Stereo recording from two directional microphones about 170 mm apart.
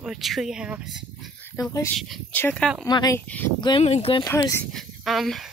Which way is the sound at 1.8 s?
Centre (ahead or behind).